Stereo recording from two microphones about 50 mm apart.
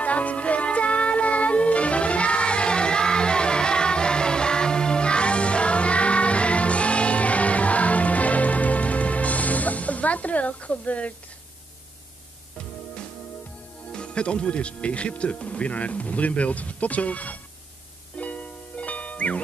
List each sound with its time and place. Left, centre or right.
0.0 s music: left
12.5 s music: left
13.9 s speech: centre
18.1 s music: left